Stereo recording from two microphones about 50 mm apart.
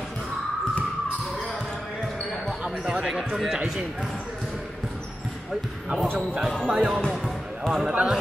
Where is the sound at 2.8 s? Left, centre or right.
Centre.